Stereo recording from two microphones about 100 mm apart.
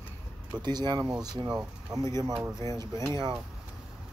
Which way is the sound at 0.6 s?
45° right (ahead or behind).